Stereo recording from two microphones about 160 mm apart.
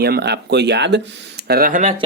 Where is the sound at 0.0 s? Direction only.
85° right; by 2.0 s 50° right (ahead or behind).